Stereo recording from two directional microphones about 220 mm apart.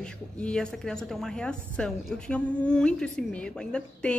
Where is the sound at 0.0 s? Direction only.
5° left (ahead or behind).